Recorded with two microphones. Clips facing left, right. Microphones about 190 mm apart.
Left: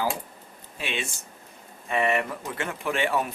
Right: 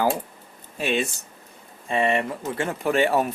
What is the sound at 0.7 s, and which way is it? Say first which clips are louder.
Speech: right 8 dB; 40° right (ahead or behind).